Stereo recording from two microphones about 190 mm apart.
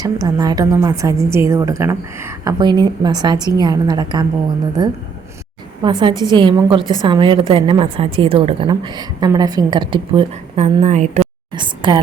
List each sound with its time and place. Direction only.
0.0 s a woman's voice: 20° right (ahead or behind)
5.8 s a woman's voice: 25° right (ahead or behind)
11.5 s a woman's voice: 25° right (ahead or behind)